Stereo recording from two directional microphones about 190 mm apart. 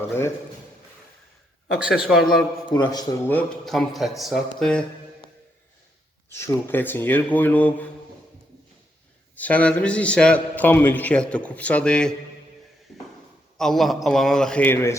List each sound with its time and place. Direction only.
0.1 s a man's voice: 15° left (ahead or behind)
1.7 s speech: 5° right (ahead or behind)
2.6 s a man's voice: 20° left (ahead or behind)
3.2 s speech: 5° left (ahead or behind)
6.4 s a man's voice: 10° left (ahead or behind)
9.3 s a man's voice: 10° left (ahead or behind)
12.9 s a sound: centre (ahead or behind)
13.6 s speech: centre (ahead or behind)